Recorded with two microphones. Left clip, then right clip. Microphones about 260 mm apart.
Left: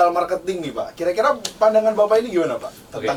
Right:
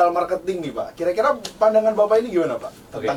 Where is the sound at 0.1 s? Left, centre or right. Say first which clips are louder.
Left 1 dB; centre.